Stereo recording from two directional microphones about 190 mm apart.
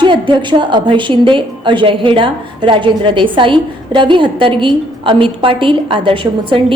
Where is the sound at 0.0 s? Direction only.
25° right (ahead or behind).